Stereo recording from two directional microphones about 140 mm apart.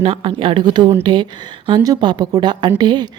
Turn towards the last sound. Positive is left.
turn(degrees=-30)  # may be behind; listen again after turning